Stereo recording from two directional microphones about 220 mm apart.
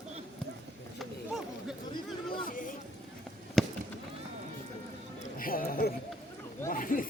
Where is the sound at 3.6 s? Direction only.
Centre (ahead or behind).